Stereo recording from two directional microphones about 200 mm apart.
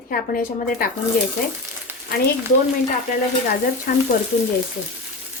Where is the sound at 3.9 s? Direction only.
45° left (ahead or behind).